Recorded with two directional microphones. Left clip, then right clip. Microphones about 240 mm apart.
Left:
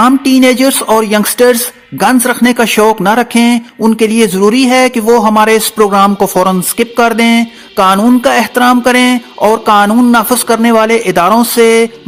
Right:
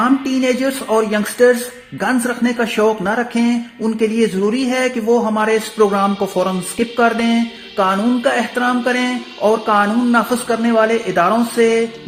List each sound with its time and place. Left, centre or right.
0.0 s a man's voice: left